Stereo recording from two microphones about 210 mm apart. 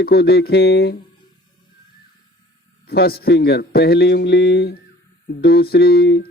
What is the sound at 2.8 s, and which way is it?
Speech, 50° left (ahead or behind).